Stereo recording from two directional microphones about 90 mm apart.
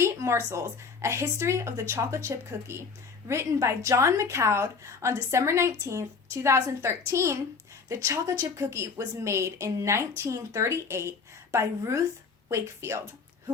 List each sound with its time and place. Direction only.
0.0 s a woman's voice: 30° right (ahead or behind)